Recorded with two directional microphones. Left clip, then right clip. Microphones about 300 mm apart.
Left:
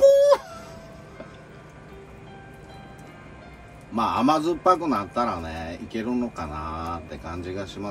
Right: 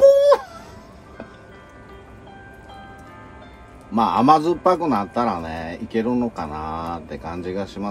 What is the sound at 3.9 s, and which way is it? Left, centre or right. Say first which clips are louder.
A man's voice: right 6 dB; right.